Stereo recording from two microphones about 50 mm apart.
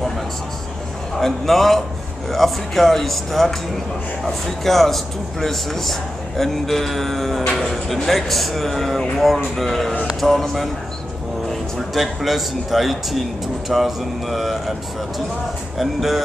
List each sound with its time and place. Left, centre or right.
1.2 s speech: centre
11.9 s speech: centre
15.8 s speech: centre